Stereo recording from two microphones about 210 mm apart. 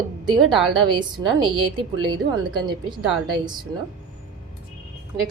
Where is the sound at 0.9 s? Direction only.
20° right (ahead or behind).